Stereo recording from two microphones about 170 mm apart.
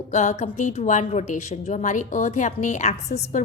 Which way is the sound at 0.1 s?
45° left (ahead or behind).